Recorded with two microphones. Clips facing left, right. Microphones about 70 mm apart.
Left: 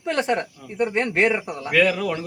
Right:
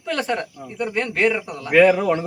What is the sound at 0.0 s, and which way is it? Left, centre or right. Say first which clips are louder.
Speech: left 1 dB; left.